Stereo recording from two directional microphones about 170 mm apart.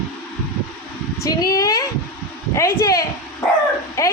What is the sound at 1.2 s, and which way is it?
A child's voice, 20° left (ahead or behind).